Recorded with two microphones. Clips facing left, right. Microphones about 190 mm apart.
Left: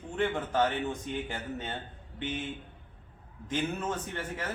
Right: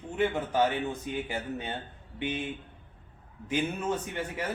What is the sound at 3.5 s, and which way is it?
A man's voice, 10° right (ahead or behind).